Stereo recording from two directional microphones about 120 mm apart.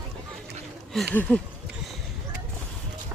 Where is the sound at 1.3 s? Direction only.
10° left (ahead or behind).